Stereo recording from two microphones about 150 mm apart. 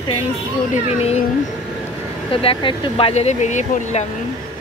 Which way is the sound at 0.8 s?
45° left (ahead or behind).